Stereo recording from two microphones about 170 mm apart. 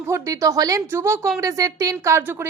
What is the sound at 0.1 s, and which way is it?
Speech, 20° right (ahead or behind).